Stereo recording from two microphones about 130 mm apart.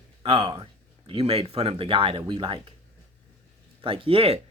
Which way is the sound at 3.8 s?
45° right (ahead or behind).